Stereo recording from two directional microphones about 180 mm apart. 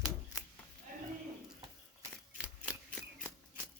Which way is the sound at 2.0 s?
10° right (ahead or behind).